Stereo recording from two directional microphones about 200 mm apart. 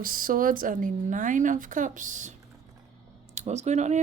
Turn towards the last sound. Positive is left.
turn(degrees=-35)  # may be behind; listen again after turning